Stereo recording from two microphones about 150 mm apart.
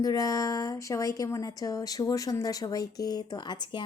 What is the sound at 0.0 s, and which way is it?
A woman's voice, 25° left (ahead or behind).